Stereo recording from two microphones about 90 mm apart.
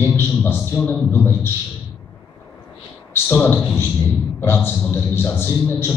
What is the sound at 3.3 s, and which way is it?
A man's voice, 25° left (ahead or behind).